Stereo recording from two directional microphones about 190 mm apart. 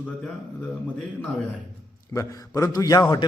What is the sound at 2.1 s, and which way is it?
A man's voice, 20° left (ahead or behind).